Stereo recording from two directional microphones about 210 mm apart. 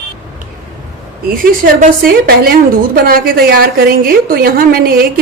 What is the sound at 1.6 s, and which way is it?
A woman's voice, 45° right (ahead or behind).